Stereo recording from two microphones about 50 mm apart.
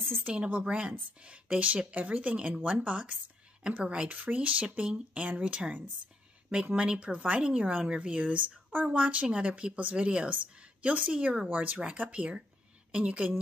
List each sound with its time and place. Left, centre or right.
0.3 s a woman's voice: right
4.1 s a woman's voice: right